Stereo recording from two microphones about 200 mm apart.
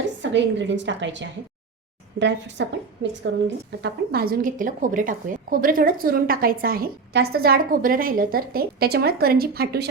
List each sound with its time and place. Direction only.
0.2 s a woman's voice: 65° right (ahead or behind)